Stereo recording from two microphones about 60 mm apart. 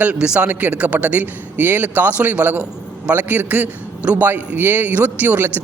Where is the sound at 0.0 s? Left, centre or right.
Right.